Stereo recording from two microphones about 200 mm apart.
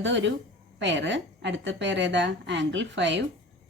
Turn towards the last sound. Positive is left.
turn(degrees=-65)  # may be behind; listen again after turning